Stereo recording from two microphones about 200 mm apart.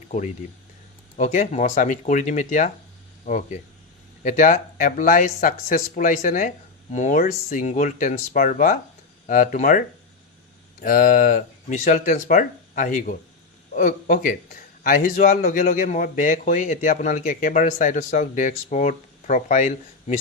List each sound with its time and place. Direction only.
1.1 s speech: 40° left (ahead or behind)